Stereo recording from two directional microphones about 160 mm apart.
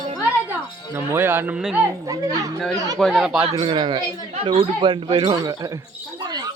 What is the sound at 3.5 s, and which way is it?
Speech, 30° right (ahead or behind).